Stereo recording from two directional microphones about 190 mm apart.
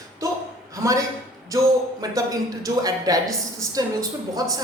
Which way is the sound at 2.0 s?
20° right (ahead or behind).